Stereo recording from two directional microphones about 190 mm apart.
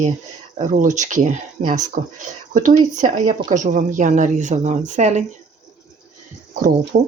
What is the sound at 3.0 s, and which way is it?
A woman's voice, 40° right (ahead or behind).